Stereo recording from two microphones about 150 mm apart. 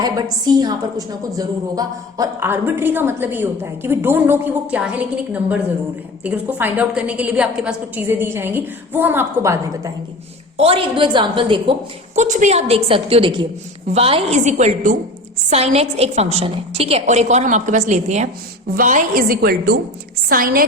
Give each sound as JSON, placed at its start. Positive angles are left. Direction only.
{"t": 0.0, "sound": "a woman's voice", "side_deg": -25}
{"t": 10.6, "sound": "a woman's voice", "side_deg": -40}
{"t": 12.1, "sound": "a woman's voice", "side_deg": -55}
{"t": 18.8, "sound": "a woman's voice", "side_deg": -60}
{"t": 20.3, "sound": "a woman's voice", "side_deg": -70}